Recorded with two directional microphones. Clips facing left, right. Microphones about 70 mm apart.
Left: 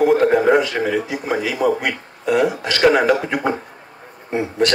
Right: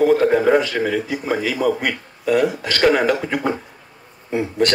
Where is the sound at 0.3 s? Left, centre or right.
Centre.